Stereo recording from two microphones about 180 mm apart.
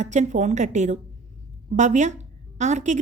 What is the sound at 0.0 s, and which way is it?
A woman's voice, 40° right (ahead or behind).